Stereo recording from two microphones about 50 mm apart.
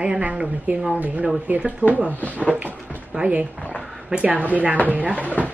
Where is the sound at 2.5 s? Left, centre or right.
Right.